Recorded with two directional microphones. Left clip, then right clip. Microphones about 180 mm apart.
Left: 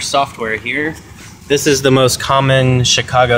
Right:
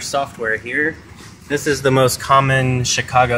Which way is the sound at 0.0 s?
45° left (ahead or behind).